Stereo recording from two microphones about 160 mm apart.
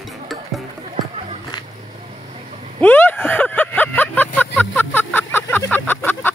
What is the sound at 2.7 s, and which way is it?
Vehicle, 10° left (ahead or behind).